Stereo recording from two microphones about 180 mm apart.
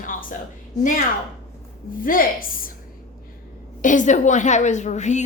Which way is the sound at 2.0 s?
50° left (ahead or behind).